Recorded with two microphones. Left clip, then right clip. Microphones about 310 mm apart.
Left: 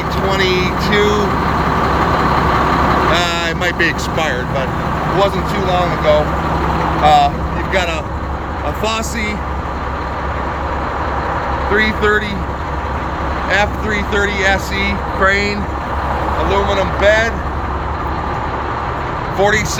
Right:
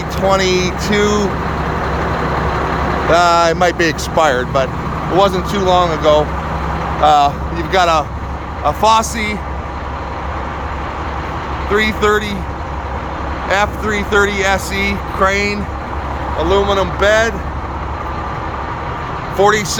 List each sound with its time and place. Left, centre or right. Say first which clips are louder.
0.3 s speech: right 3 dB; centre
3.1 s speech: right 5 dB; centre
11.7 s speech: right 1 dB; centre
13.5 s speech: right 1 dB; centre
19.4 s speech: right 2 dB; centre